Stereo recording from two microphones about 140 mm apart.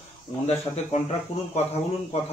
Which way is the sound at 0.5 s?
50° left (ahead or behind).